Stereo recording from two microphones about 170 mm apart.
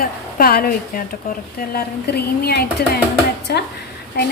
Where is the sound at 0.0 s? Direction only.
60° left (ahead or behind).